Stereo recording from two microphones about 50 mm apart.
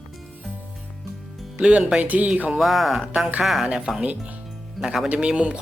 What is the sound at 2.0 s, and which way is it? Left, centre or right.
Speech, right.